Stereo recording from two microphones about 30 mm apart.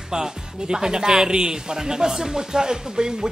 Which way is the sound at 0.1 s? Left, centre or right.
Right.